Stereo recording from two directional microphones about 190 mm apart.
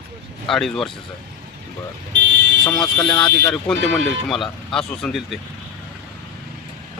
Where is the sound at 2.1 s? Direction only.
70° right (ahead or behind).